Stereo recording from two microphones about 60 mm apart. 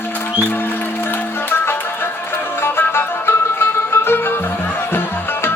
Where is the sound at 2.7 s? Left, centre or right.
Left.